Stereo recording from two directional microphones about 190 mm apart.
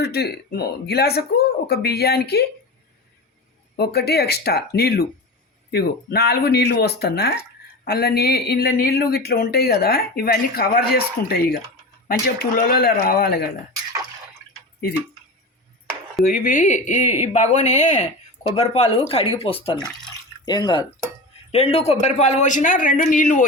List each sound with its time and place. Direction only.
0.0 s speech: 55° left (ahead or behind)
3.8 s speech: 55° left (ahead or behind)
16.2 s speech: 50° left (ahead or behind)